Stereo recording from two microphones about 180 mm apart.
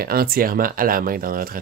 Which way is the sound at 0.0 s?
55° right (ahead or behind).